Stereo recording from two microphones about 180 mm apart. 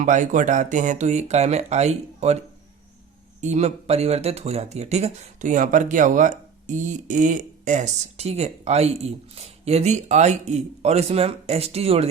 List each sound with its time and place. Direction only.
0.0 s speech: 45° right (ahead or behind)
3.4 s speech: 40° right (ahead or behind)